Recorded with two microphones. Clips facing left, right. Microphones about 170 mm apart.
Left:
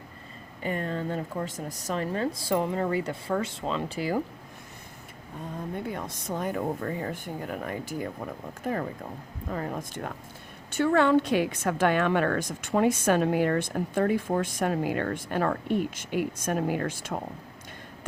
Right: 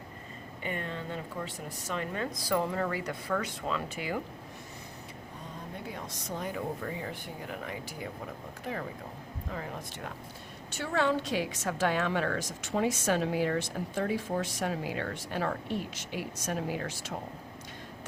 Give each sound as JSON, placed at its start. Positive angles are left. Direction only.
{"t": 0.6, "sound": "speech", "side_deg": 40}
{"t": 5.7, "sound": "a woman's voice", "side_deg": 55}